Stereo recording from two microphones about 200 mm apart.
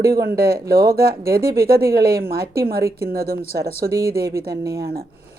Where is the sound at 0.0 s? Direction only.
50° right (ahead or behind).